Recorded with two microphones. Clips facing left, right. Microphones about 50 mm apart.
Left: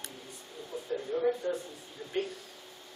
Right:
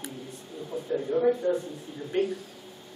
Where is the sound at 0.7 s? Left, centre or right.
Centre.